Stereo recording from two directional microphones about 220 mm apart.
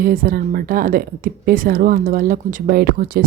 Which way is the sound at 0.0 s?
40° right (ahead or behind).